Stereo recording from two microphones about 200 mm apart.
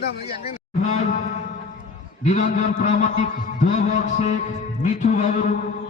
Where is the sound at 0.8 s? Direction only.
35° left (ahead or behind).